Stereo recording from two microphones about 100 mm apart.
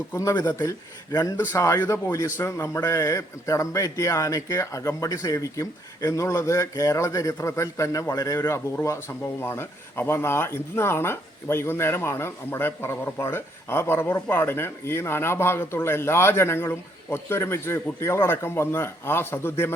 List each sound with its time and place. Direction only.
0.2 s a man's voice: 40° left (ahead or behind); by 19.7 s 25° left (ahead or behind)